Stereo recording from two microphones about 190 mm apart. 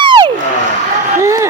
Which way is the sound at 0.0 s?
25° right (ahead or behind).